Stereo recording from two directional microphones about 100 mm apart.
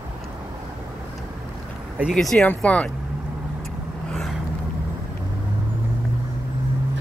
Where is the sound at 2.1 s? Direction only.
5° left (ahead or behind).